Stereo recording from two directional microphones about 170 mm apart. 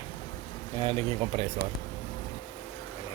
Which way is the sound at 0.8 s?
35° right (ahead or behind).